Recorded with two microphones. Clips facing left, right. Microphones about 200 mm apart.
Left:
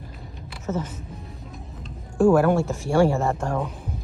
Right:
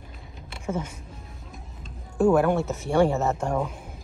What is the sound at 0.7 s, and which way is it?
Speech, 10° right (ahead or behind).